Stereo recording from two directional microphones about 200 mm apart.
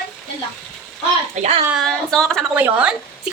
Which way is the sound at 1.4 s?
30° right (ahead or behind).